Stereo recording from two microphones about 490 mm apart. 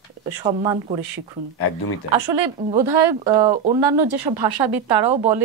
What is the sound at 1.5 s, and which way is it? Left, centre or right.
Speech, left.